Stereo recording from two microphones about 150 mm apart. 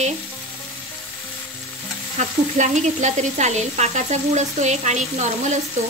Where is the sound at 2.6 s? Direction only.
50° right (ahead or behind).